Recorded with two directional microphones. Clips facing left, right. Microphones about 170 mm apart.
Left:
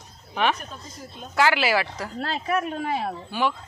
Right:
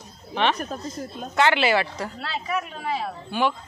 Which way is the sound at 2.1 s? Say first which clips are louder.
Left 5 dB; 50° left (ahead or behind).